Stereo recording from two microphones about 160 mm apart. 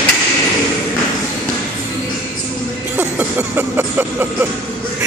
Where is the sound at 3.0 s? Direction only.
10° right (ahead or behind).